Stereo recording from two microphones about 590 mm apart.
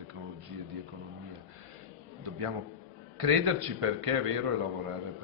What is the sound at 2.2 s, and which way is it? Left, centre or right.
A man's voice, right.